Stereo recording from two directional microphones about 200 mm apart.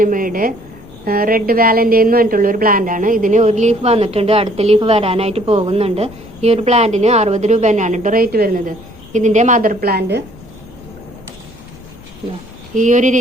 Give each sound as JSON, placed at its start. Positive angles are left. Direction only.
{"t": 0.0, "sound": "a woman's voice", "side_deg": -45}
{"t": 12.7, "sound": "a woman's voice", "side_deg": -40}